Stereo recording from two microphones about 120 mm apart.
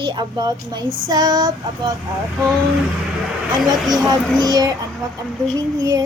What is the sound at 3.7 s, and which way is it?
Speech, 35° right (ahead or behind).